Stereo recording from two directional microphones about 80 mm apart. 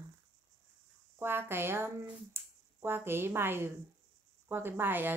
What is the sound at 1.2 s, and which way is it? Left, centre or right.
Speech, right.